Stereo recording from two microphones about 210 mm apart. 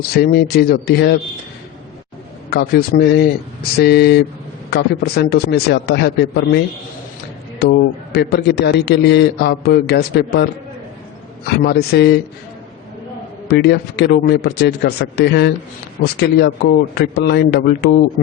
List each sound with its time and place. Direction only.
0.1 s a man's voice: 50° left (ahead or behind)
2.5 s a man's voice: 50° left (ahead or behind)
7.6 s a man's voice: 50° left (ahead or behind)
11.4 s a man's voice: 50° left (ahead or behind)
13.5 s a man's voice: 50° left (ahead or behind)